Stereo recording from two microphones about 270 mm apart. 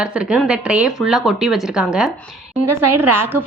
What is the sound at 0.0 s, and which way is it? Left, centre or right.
A woman's voice, centre.